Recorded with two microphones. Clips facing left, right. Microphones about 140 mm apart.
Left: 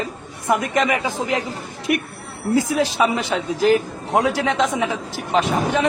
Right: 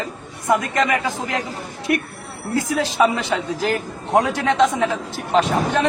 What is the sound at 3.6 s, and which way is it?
A man's voice, centre (ahead or behind).